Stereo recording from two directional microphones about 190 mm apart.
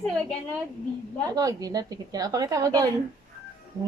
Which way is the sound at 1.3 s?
20° right (ahead or behind).